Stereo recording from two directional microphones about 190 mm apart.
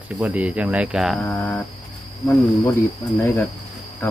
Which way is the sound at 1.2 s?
10° left (ahead or behind).